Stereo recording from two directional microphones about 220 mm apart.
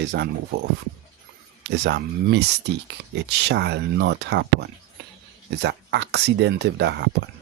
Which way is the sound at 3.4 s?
50° right (ahead or behind).